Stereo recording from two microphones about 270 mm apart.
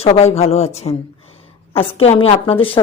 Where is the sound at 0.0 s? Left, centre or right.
Left.